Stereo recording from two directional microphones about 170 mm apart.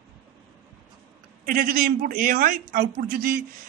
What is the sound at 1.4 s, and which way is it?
A man's voice, 55° right (ahead or behind).